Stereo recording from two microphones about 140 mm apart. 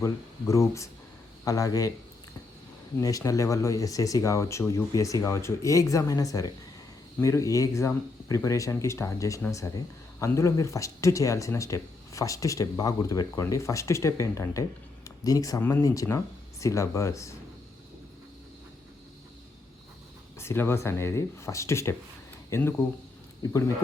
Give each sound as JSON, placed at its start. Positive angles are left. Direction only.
{"t": 0.0, "sound": "speech", "side_deg": 20}
{"t": 3.0, "sound": "speech", "side_deg": 25}
{"t": 20.4, "sound": "speech", "side_deg": 15}